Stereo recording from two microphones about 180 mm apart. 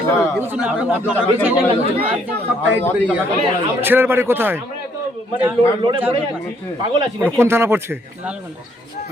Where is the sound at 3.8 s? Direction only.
10° right (ahead or behind).